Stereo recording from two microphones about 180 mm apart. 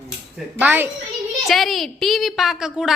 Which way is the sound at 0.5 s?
10° right (ahead or behind).